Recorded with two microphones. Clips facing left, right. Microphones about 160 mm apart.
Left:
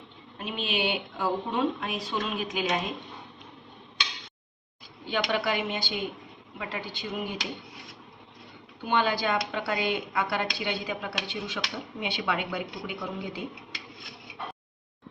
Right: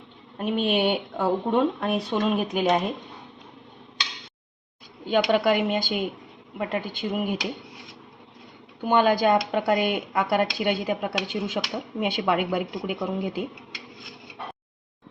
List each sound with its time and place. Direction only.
0.3 s speech: 55° right (ahead or behind)
5.0 s speech: 50° right (ahead or behind)
8.8 s speech: 45° right (ahead or behind)